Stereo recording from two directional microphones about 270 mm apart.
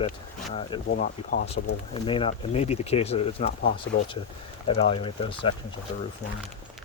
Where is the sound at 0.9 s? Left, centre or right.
Left.